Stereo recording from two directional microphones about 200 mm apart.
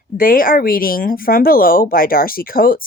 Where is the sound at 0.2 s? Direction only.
45° left (ahead or behind).